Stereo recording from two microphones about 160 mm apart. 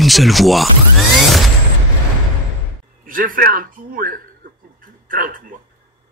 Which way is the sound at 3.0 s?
60° right (ahead or behind).